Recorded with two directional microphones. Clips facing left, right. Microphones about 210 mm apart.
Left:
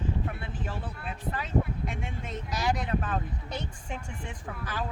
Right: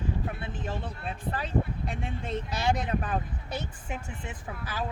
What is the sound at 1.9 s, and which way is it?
Speech, 35° right (ahead or behind).